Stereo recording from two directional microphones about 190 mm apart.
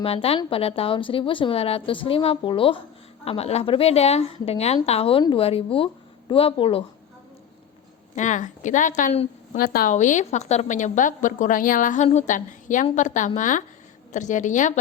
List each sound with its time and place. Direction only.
0.0 s a woman's voice: 30° left (ahead or behind)
8.1 s a woman's voice: 40° left (ahead or behind)